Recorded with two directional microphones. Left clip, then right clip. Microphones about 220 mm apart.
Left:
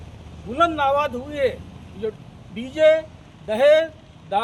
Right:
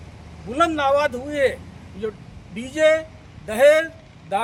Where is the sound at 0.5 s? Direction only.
50° right (ahead or behind).